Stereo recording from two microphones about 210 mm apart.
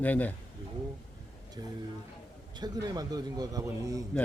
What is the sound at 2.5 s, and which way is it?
A man's voice, 20° right (ahead or behind).